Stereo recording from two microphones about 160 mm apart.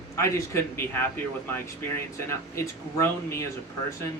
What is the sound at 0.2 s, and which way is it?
Speech, 20° left (ahead or behind).